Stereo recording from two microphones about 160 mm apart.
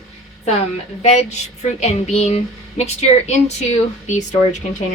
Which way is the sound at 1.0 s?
45° left (ahead or behind).